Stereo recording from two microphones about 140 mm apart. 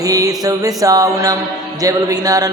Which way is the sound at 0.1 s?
25° right (ahead or behind).